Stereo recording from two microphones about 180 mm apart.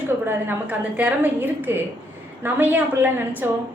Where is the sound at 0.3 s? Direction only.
10° right (ahead or behind).